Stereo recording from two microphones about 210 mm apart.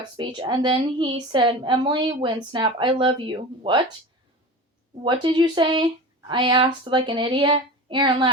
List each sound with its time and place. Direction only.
0.2 s a woman's voice: 25° right (ahead or behind)
5.0 s a woman's voice: 20° right (ahead or behind)